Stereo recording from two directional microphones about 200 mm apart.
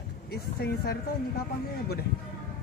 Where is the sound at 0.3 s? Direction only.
50° left (ahead or behind).